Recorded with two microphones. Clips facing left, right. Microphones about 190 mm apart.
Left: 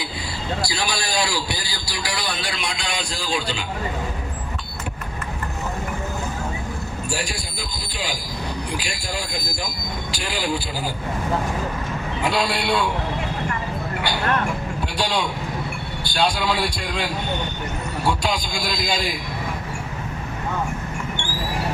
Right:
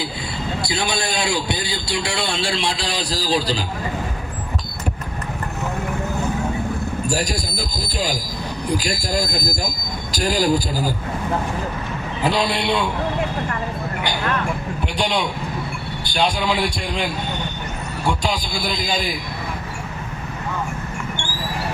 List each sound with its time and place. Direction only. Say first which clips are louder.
0.6 s a man's voice: right 4 dB; 20° right (ahead or behind)
7.1 s speech: right 4 dB; 40° right (ahead or behind)
12.2 s a man's voice: right 3 dB; 20° right (ahead or behind)
16.5 s a man's voice: right 2 dB; 15° right (ahead or behind)